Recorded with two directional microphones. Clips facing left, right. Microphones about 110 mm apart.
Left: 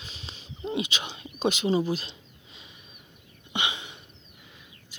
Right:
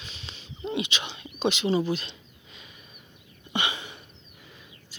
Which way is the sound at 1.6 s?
15° left (ahead or behind).